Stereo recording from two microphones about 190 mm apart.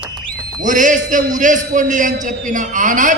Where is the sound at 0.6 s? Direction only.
40° right (ahead or behind).